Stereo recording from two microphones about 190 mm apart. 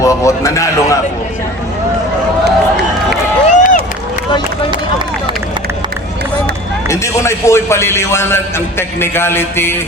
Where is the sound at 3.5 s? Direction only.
40° left (ahead or behind).